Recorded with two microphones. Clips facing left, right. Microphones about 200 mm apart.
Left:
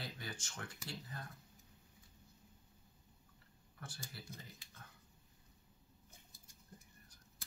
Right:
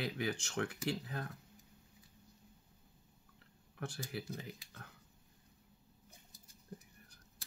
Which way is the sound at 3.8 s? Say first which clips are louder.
Right 10 dB; 70° right (ahead or behind).